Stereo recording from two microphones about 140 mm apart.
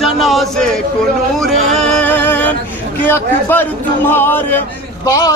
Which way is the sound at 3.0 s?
15° left (ahead or behind).